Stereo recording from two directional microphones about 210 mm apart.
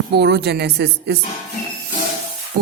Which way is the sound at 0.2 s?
50° right (ahead or behind).